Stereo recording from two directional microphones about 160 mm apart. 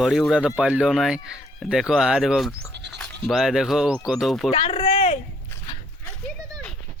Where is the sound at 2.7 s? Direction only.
90° right.